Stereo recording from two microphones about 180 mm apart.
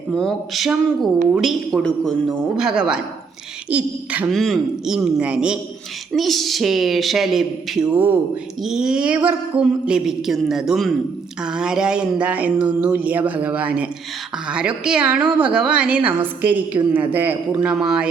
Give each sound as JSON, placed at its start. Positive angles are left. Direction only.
{"t": 0.1, "sound": "a woman's voice", "side_deg": 0}